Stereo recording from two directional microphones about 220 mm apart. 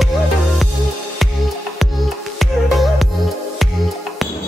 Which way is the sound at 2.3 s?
Centre (ahead or behind).